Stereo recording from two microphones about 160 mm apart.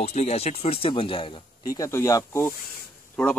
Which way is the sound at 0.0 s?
40° left (ahead or behind).